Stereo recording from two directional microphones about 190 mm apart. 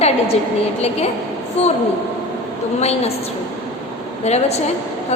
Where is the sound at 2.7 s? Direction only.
35° left (ahead or behind).